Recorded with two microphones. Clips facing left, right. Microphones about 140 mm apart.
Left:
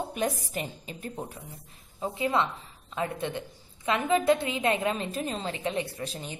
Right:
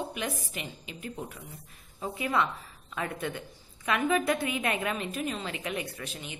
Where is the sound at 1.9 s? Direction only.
25° left (ahead or behind).